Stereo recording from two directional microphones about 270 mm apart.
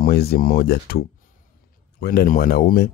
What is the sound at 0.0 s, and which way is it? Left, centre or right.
Speech, left.